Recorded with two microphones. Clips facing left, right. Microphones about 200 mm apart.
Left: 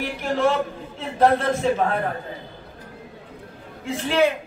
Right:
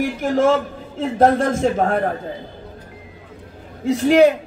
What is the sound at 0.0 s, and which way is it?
Speech, 45° right (ahead or behind).